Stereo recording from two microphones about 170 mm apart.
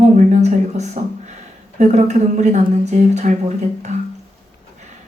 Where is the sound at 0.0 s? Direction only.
45° right (ahead or behind).